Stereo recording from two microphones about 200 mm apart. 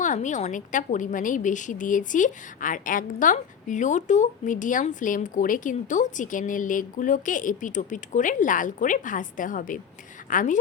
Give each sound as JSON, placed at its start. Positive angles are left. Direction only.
{"t": 0.0, "sound": "a woman's voice", "side_deg": 40}